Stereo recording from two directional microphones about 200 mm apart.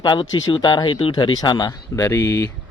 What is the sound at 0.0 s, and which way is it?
Speech, 20° left (ahead or behind).